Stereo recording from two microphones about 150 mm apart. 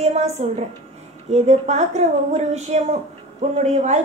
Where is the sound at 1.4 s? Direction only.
50° right (ahead or behind).